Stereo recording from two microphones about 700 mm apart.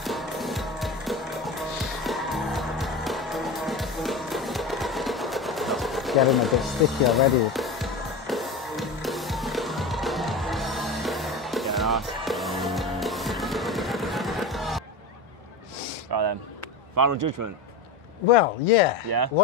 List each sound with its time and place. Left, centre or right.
0.0 s music: centre
16.1 s a sound: right
16.9 s speech: right
18.3 s speech: left
19.0 s speech: right